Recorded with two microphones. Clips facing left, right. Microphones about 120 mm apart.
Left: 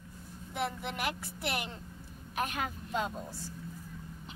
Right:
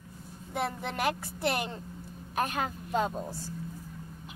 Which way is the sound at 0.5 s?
35° right (ahead or behind).